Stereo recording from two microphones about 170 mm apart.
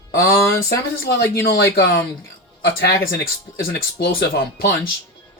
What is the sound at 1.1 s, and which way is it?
Speech, 75° left (ahead or behind).